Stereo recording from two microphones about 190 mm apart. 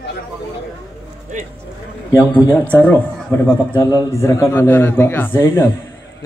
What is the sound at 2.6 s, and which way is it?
A man's voice, 10° left (ahead or behind).